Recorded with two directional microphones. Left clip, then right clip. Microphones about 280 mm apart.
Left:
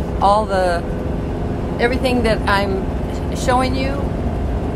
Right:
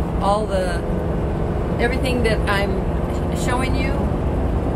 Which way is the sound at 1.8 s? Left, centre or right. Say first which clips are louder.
Left 4 dB; left.